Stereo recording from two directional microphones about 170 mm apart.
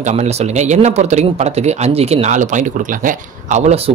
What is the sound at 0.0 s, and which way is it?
Speech, 40° right (ahead or behind).